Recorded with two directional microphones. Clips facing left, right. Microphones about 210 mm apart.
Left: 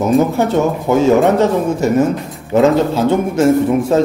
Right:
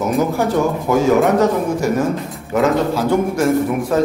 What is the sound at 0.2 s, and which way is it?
Speech, 25° left (ahead or behind).